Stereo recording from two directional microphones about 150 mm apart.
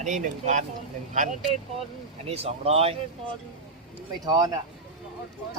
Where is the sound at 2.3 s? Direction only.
45° right (ahead or behind).